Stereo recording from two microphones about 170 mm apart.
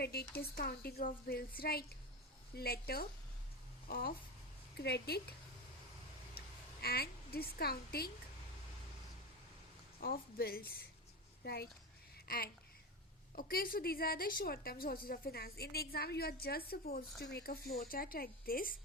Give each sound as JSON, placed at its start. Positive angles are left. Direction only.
{"t": 0.0, "sound": "a woman's voice", "side_deg": 70}
{"t": 4.8, "sound": "a woman's voice", "side_deg": 75}
{"t": 6.4, "sound": "a sound", "side_deg": 60}
{"t": 6.8, "sound": "a woman's voice", "side_deg": 65}
{"t": 10.0, "sound": "a woman's voice", "side_deg": 60}
{"t": 12.1, "sound": "a sound", "side_deg": 60}
{"t": 13.3, "sound": "a woman's voice", "side_deg": 60}